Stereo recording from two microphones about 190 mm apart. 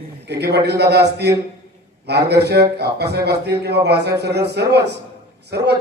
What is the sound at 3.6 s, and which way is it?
A man's voice, 60° right (ahead or behind).